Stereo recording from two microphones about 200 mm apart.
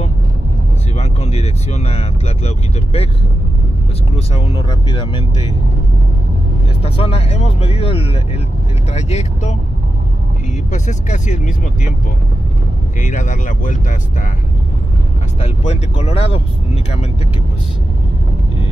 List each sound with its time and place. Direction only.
0.9 s speech: 30° left (ahead or behind)
4.3 s speech: 30° left (ahead or behind)
6.8 s speech: 30° left (ahead or behind)
10.7 s speech: 35° left (ahead or behind)
13.0 s speech: 40° left (ahead or behind)
16.0 s speech: 30° left (ahead or behind)